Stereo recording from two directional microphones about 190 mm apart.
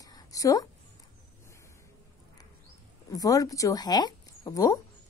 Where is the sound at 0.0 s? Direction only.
20° left (ahead or behind).